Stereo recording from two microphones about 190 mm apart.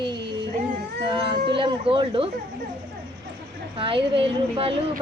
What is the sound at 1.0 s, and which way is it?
Cat, 25° right (ahead or behind).